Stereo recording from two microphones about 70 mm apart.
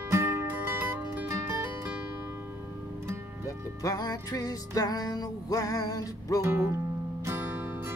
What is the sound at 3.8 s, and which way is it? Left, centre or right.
Music, left.